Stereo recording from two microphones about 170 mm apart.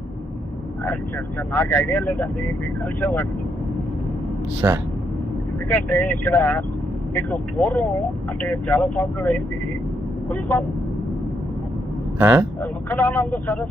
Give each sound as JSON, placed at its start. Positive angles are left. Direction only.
{"t": 1.5, "sound": "speech", "side_deg": 15}
{"t": 4.6, "sound": "speech", "side_deg": -20}
{"t": 5.7, "sound": "speech", "side_deg": 10}
{"t": 12.2, "sound": "speech", "side_deg": -10}
{"t": 12.9, "sound": "speech", "side_deg": 15}